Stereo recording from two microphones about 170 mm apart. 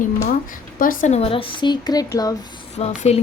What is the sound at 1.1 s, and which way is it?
Speech, 35° left (ahead or behind).